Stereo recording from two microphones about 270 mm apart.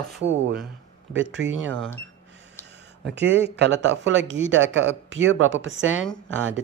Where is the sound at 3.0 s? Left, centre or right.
Right.